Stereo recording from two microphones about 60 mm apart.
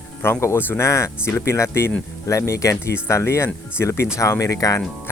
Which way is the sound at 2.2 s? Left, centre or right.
Left.